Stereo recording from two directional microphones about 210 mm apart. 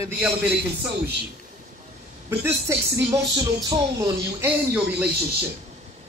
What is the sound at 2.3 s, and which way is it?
Speech, 10° right (ahead or behind).